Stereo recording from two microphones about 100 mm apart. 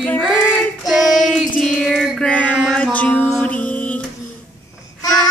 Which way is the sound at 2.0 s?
Centre (ahead or behind).